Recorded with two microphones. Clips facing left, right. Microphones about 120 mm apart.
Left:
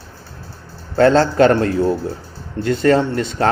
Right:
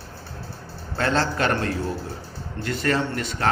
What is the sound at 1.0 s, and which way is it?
Speech, 35° left (ahead or behind).